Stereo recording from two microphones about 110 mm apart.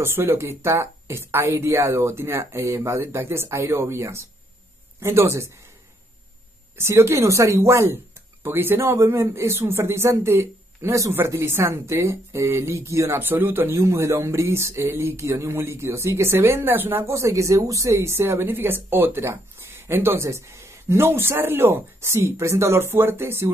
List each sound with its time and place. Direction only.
0.0 s speech: 20° right (ahead or behind)
6.8 s speech: 25° right (ahead or behind)